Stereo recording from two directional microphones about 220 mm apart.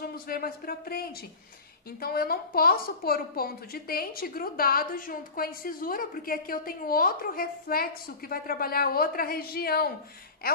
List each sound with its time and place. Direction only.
0.0 s a woman's voice: 45° left (ahead or behind)